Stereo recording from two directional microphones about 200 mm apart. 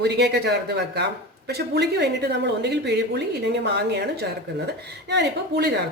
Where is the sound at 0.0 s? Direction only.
55° right (ahead or behind).